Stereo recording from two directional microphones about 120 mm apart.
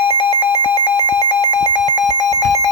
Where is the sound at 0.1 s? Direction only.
35° left (ahead or behind).